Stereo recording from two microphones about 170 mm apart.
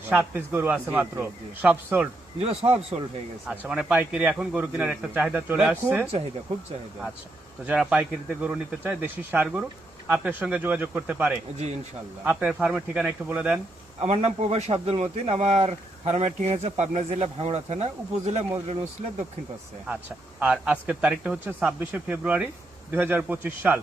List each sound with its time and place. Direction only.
0.1 s speech: 10° right (ahead or behind)
2.4 s speech: 35° right (ahead or behind)
3.5 s speech: 10° right (ahead or behind)
7.6 s speech: 5° right (ahead or behind)
11.5 s speech: 40° right (ahead or behind)
12.2 s speech: 10° right (ahead or behind)
14.0 s speech: 40° right (ahead or behind)
19.9 s speech: 10° right (ahead or behind)